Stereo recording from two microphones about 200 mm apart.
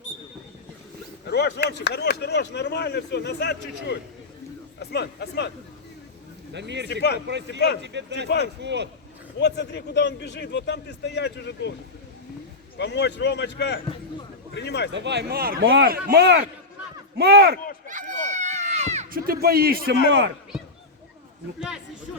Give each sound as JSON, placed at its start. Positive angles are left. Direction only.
{"t": 1.3, "sound": "speech", "side_deg": 55}
{"t": 6.5, "sound": "speech", "side_deg": -60}
{"t": 6.8, "sound": "speech", "side_deg": 55}
{"t": 7.8, "sound": "speech", "side_deg": -60}
{"t": 9.4, "sound": "speech", "side_deg": 60}
{"t": 12.7, "sound": "speech", "side_deg": 60}
{"t": 14.9, "sound": "a man's voice", "side_deg": -60}
{"t": 17.8, "sound": "run", "side_deg": -40}
{"t": 19.2, "sound": "a man's voice", "side_deg": -50}